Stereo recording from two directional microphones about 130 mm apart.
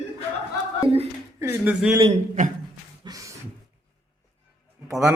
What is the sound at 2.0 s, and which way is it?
Speech, 80° right.